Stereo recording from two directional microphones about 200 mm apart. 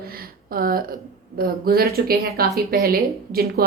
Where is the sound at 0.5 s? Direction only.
45° right (ahead or behind).